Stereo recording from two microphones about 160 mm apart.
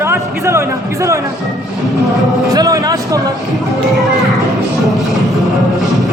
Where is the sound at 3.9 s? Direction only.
Centre (ahead or behind).